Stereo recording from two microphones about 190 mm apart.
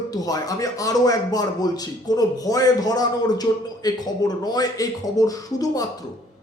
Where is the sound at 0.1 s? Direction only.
20° left (ahead or behind).